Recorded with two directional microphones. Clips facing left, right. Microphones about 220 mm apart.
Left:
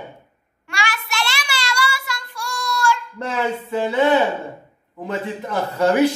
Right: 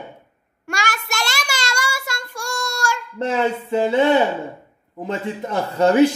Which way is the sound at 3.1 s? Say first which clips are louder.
Right 3 dB; 25° right (ahead or behind).